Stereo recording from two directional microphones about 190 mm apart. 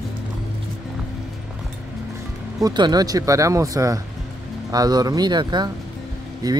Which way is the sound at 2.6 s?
20° right (ahead or behind).